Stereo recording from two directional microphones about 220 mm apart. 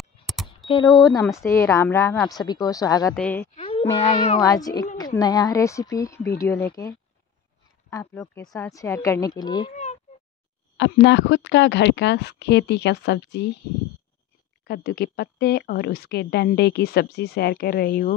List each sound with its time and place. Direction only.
0.7 s a woman's voice: 20° left (ahead or behind)
3.2 s a woman's voice: 5° left (ahead or behind)
3.5 s a sound: 25° left (ahead or behind)
4.0 s a child's voice: 30° left (ahead or behind)
4.4 s a woman's voice: 15° left (ahead or behind)
7.9 s a woman's voice: 15° left (ahead or behind)
10.8 s speech: 55° left (ahead or behind)
14.6 s speech: 45° left (ahead or behind)